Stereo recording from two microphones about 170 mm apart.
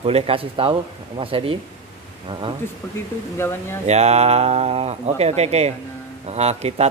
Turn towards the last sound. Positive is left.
turn(degrees=-40)  # may be behind; listen again after turning